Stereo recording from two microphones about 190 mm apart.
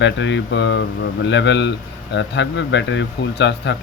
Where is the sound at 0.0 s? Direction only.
70° left (ahead or behind).